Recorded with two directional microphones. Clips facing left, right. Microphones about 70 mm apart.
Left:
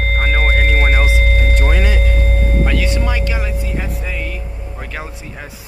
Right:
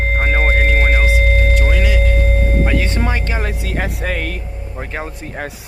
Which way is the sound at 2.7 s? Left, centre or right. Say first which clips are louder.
Even; right.